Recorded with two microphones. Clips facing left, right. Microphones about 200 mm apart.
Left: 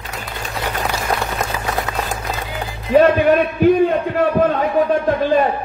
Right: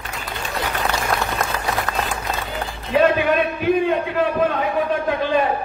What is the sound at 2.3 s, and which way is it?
Music, 5° left (ahead or behind).